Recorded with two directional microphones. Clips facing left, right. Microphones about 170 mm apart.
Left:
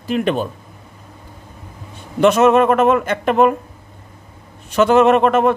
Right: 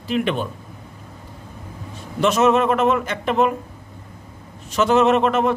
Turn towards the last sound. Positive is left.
turn(degrees=55)  # may be behind; listen again after turning